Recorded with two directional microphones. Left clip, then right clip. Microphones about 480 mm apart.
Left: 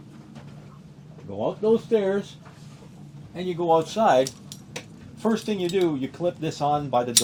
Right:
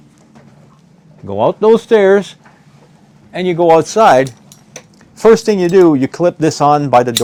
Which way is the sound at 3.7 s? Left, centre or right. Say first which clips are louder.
Right 10 dB; right.